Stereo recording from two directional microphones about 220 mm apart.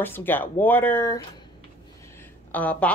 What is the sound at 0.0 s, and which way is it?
A woman's voice, 10° left (ahead or behind).